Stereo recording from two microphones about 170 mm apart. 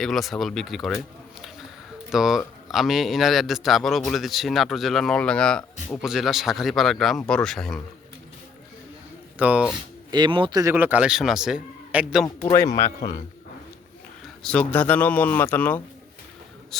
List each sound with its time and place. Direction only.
0.0 s a man's voice: centre (ahead or behind)
9.4 s speech: 5° right (ahead or behind)
10.1 s speech: 25° right (ahead or behind); by 12.2 s 5° right (ahead or behind)
12.5 s speech: 20° left (ahead or behind)
14.4 s speech: 5° left (ahead or behind)